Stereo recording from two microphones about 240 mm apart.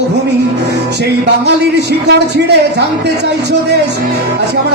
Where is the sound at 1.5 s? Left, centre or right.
Right.